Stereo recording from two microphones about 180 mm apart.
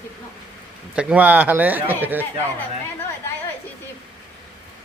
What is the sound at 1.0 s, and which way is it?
Speech, 5° right (ahead or behind).